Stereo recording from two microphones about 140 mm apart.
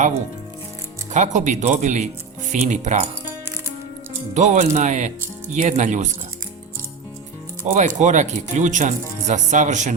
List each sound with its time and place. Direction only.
1.1 s speech: 60° right (ahead or behind)
4.4 s speech: 60° right (ahead or behind)
7.8 s speech: 60° right (ahead or behind)